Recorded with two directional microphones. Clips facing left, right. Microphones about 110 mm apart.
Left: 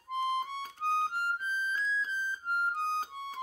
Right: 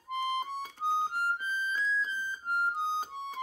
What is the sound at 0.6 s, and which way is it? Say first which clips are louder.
Music: right 1 dB; 10° right (ahead or behind).